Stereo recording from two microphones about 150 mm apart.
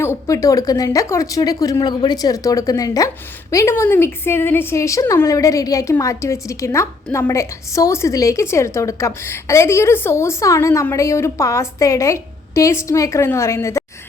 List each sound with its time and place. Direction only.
0.0 s a woman's voice: 20° left (ahead or behind)